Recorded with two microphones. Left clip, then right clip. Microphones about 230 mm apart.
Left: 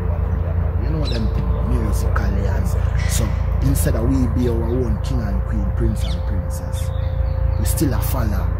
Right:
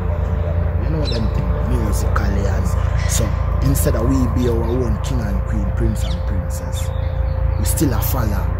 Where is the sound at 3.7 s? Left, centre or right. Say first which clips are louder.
Right 2 dB; centre.